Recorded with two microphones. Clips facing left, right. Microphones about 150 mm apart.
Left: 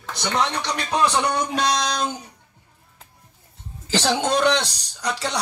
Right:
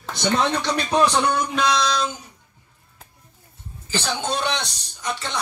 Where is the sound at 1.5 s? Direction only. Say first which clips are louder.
Right 2 dB; 40° left (ahead or behind).